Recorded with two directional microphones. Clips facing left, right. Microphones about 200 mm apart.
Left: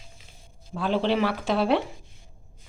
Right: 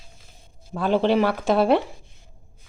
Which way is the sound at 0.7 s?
50° right (ahead or behind).